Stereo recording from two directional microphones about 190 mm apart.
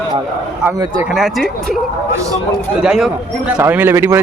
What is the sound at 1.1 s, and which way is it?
Speech, centre (ahead or behind).